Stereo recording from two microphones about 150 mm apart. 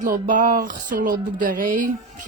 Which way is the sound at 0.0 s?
65° right (ahead or behind).